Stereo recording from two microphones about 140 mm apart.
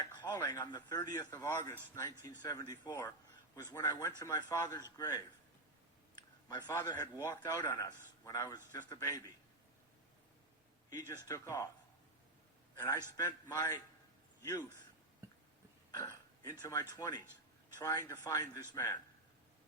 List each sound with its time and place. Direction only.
0.0 s a man's voice: 30° left (ahead or behind)
6.6 s a man's voice: 20° left (ahead or behind)
10.8 s a man's voice: 25° left (ahead or behind)
12.8 s a man's voice: 20° left (ahead or behind)
15.9 s a sound: 20° left (ahead or behind)
17.0 s a man's voice: 30° left (ahead or behind)